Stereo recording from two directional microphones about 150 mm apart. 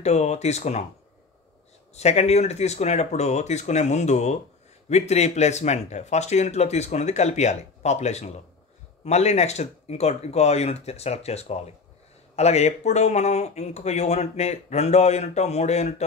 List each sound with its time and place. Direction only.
0.0 s speech: 50° left (ahead or behind)
2.0 s speech: 45° left (ahead or behind)